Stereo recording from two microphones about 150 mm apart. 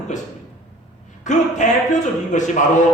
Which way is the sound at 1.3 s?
55° left (ahead or behind).